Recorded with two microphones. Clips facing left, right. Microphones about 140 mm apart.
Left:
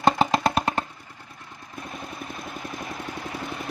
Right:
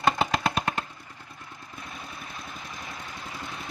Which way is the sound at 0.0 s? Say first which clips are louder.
Left 4 dB; 35° left (ahead or behind).